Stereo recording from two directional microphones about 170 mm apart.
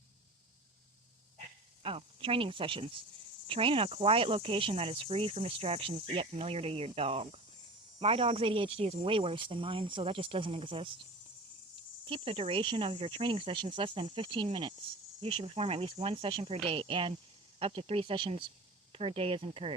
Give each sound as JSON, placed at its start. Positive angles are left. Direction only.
{"t": 1.8, "sound": "speech", "side_deg": -35}
{"t": 12.0, "sound": "speech", "side_deg": -35}